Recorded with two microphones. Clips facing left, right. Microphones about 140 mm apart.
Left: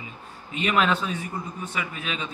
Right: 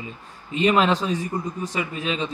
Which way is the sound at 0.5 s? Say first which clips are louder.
Right 4 dB; 30° right (ahead or behind).